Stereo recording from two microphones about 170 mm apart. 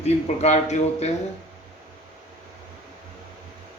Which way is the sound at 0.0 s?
40° left (ahead or behind).